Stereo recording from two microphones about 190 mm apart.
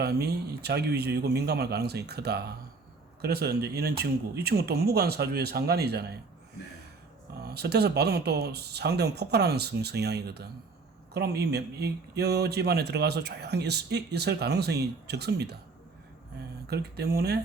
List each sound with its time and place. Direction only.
0.0 s speech: 60° right (ahead or behind)
7.4 s speech: 60° right (ahead or behind)
16.6 s speech: 55° right (ahead or behind)